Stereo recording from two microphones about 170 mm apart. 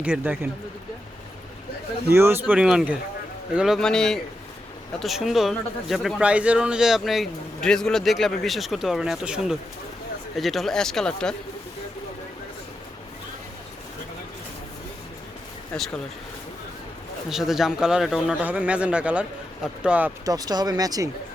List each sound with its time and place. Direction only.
0.0 s speech: 5° right (ahead or behind)
2.0 s speech: 15° right (ahead or behind); by 11.3 s 5° left (ahead or behind)
15.7 s speech: 5° left (ahead or behind)
17.2 s speech: centre (ahead or behind)
20.2 s speech: 20° right (ahead or behind)